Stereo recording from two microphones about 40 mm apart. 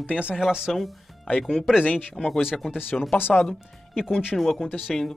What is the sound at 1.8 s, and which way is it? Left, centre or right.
Speech, left.